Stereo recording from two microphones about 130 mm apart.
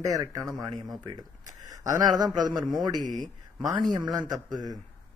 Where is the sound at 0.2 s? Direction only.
25° right (ahead or behind).